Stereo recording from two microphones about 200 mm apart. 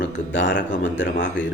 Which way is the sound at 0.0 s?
65° left (ahead or behind).